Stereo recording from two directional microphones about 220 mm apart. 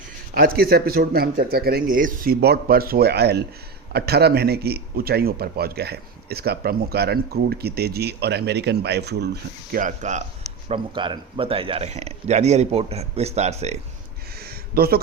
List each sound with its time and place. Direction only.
0.3 s a man's voice: 45° right (ahead or behind)
10.7 s speech: 20° right (ahead or behind)
14.3 s a sound: 45° right (ahead or behind)